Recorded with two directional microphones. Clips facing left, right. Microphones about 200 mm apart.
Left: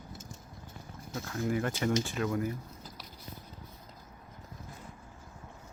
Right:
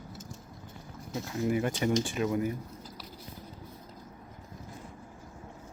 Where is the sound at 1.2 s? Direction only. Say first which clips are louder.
Right 3 dB; 20° right (ahead or behind).